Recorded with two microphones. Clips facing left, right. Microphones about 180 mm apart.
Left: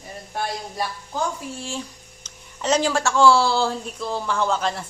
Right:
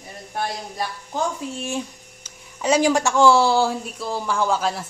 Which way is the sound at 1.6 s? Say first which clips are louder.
Right 4 dB; 20° right (ahead or behind).